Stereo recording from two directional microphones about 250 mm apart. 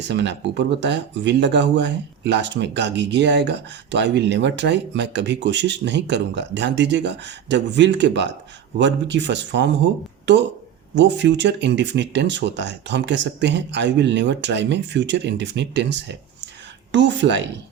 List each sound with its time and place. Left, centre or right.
0.0 s speech: right